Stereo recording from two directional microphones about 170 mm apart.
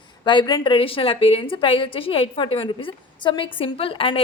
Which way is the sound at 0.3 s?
25° left (ahead or behind).